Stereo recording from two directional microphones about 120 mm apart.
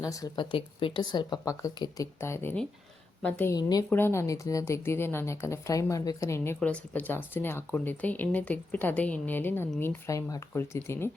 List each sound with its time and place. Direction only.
0.0 s speech: 30° left (ahead or behind)
0.5 s a woman's voice: 45° left (ahead or behind); by 3.5 s 10° left (ahead or behind)
3.5 s a woman's voice: 30° left (ahead or behind)
3.8 s speech: 15° left (ahead or behind)
6.6 s speech: 10° left (ahead or behind)